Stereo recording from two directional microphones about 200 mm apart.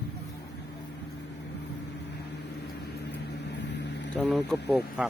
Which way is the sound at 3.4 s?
60° left (ahead or behind).